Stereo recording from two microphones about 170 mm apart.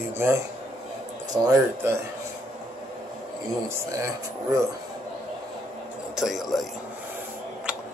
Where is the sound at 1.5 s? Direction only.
15° right (ahead or behind).